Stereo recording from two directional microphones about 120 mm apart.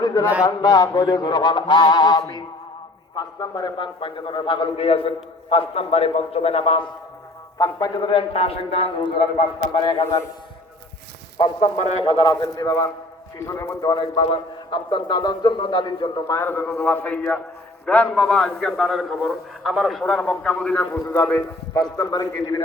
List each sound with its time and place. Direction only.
0.0 s a sound: 30° left (ahead or behind)
0.4 s a man's voice: 30° left (ahead or behind); by 6.8 s 55° left (ahead or behind)
7.6 s a man's voice: 35° left (ahead or behind)
11.8 s speech: 70° left (ahead or behind)
12.0 s a man's voice: 40° left (ahead or behind)
14.2 s a man's voice: 45° left (ahead or behind)
16.2 s a man's voice: 20° left (ahead or behind)
21.0 s a man's voice: 30° left (ahead or behind)